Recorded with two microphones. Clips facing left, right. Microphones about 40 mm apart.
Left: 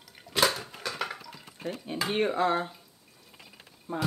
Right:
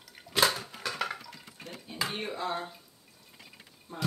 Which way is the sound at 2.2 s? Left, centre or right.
Left.